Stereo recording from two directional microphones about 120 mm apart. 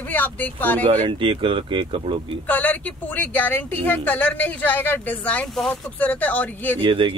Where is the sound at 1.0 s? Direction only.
45° right (ahead or behind).